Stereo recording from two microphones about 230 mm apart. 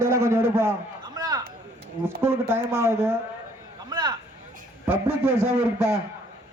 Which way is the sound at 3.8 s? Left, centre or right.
Centre.